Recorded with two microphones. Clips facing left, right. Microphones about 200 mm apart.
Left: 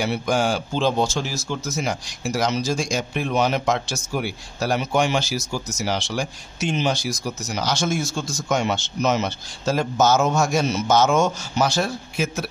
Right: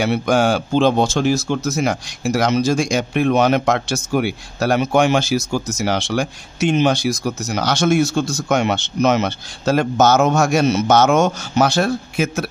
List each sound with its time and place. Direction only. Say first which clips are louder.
0.0 s speech: right 5 dB; 65° right (ahead or behind)